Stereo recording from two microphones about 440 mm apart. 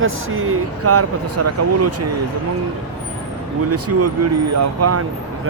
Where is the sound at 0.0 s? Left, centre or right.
Right.